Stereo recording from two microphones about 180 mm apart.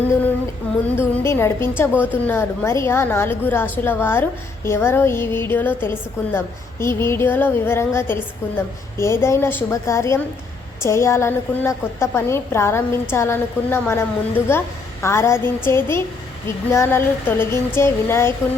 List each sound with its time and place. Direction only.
0.9 s a woman's voice: 15° left (ahead or behind)
1.9 s a woman's voice: 10° right (ahead or behind)
2.2 s a woman's voice: 10° left (ahead or behind)